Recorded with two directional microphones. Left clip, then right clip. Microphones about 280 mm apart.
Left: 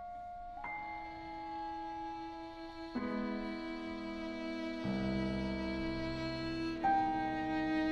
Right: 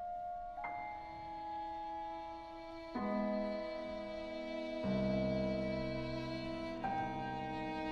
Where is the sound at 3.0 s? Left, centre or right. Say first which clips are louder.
Right 4 dB; centre.